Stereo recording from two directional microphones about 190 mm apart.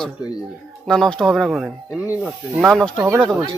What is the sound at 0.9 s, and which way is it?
Speech, 5° left (ahead or behind).